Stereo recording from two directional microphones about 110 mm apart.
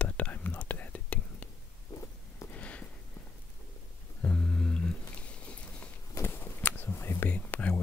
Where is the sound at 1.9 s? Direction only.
30° left (ahead or behind).